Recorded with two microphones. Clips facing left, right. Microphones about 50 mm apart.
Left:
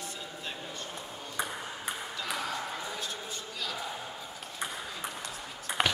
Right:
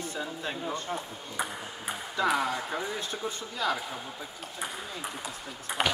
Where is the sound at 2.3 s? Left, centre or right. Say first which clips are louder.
Right 6 dB; right.